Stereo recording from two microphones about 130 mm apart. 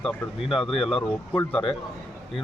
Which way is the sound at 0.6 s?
45° left (ahead or behind).